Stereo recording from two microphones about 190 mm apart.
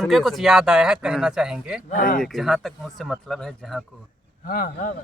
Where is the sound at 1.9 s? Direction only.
45° left (ahead or behind).